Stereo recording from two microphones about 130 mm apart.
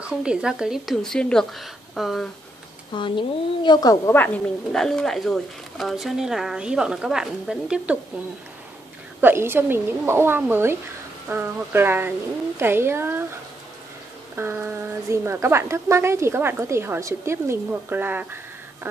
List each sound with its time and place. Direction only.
0.0 s speech: 5° right (ahead or behind)
2.9 s speech: 35° left (ahead or behind); by 4.4 s 15° left (ahead or behind)
4.7 s speech: 5° left (ahead or behind)
9.2 s a woman's voice: 15° right (ahead or behind)
14.3 s a woman's voice: 15° right (ahead or behind)